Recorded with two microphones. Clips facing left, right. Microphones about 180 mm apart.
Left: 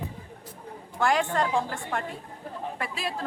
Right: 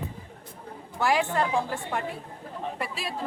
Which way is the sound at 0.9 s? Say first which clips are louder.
Even; 5° right (ahead or behind).